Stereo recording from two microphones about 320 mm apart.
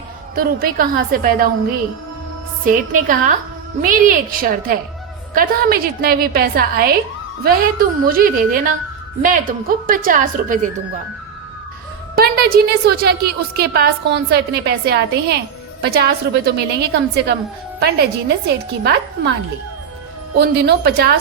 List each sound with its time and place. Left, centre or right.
0.3 s a woman's voice: right
2.6 s a woman's voice: right
12.1 s a woman's voice: right
20.4 s a woman's voice: right